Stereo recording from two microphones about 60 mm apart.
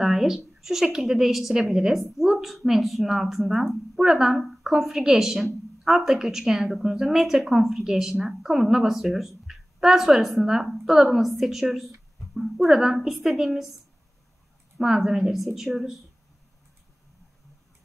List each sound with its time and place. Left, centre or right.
0.0 s a woman's voice: centre
12.6 s speech: centre
14.8 s a woman's voice: centre